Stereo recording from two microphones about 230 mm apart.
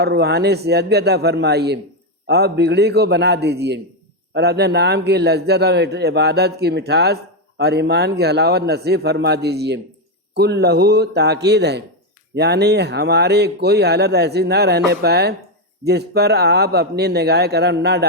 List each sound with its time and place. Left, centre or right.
0.0 s a man's voice: right